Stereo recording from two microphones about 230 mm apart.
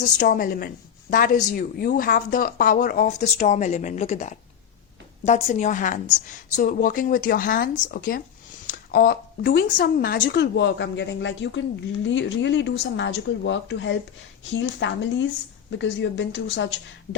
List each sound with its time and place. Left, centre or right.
0.0 s speech: left